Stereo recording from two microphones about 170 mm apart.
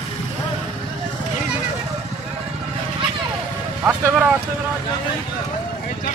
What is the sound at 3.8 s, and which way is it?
Speech, 10° right (ahead or behind).